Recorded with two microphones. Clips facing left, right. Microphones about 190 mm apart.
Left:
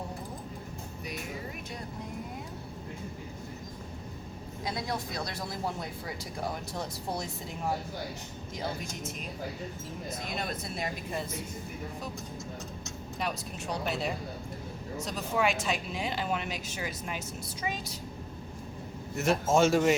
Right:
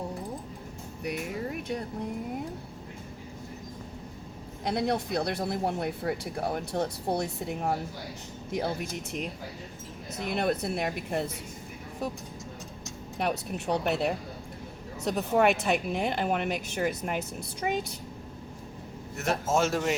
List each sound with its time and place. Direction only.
4.6 s speech: 65° right (ahead or behind)
10.2 s speech: 65° right (ahead or behind)
13.1 s speech: 60° right (ahead or behind)
19.1 s speech: centre (ahead or behind)